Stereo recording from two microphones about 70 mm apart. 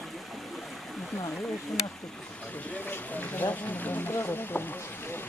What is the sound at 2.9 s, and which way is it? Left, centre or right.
Speech, left.